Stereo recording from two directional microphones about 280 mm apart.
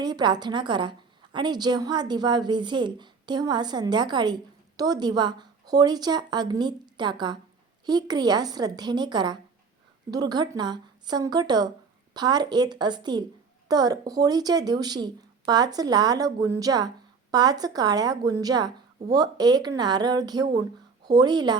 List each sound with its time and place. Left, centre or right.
0.0 s a woman's voice: centre